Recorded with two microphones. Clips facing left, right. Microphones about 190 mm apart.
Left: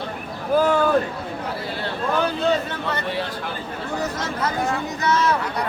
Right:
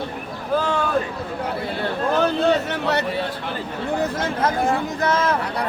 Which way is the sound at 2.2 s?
70° right (ahead or behind).